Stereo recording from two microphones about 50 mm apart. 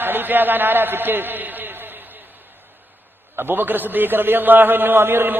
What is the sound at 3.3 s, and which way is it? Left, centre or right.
A man's voice, right.